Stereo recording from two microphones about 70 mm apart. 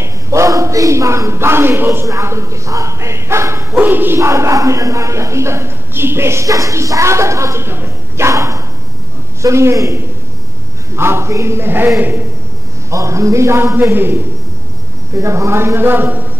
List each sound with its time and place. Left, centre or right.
0.0 s a sound: right
2.0 s speech: right
3.7 s speech: right
8.3 s a sound: right
9.4 s speech: right
11.0 s a man's voice: right
12.9 s a man's voice: right
15.1 s a man's voice: right